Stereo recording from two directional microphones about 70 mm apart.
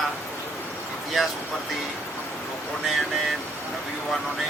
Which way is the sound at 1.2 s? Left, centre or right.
Centre.